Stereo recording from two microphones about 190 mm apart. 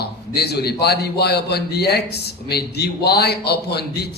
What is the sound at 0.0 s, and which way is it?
A man's voice, 60° left (ahead or behind).